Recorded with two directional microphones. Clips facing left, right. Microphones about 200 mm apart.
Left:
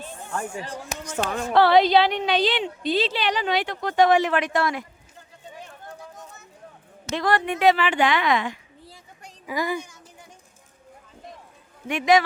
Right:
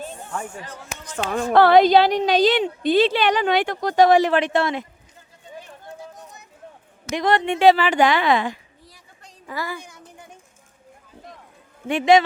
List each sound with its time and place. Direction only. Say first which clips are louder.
1.3 s a woman's voice: right 4 dB; 40° right (ahead or behind)
3.8 s a woman's voice: right 3 dB; 35° right (ahead or behind)
7.1 s a woman's voice: right 3 dB; 20° right (ahead or behind)
9.2 s a sound: left 3 dB; 15° left (ahead or behind)
11.9 s a man's voice: right 4 dB; 30° right (ahead or behind)